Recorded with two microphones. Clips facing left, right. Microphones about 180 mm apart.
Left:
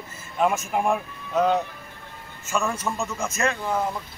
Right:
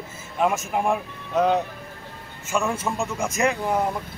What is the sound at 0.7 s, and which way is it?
Speech, 5° right (ahead or behind).